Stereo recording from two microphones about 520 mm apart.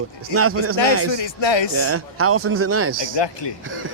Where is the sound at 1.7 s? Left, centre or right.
Right.